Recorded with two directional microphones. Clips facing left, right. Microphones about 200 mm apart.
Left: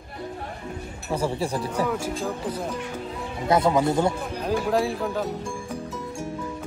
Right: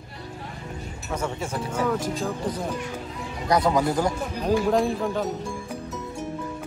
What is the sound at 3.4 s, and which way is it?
Speech, 25° left (ahead or behind).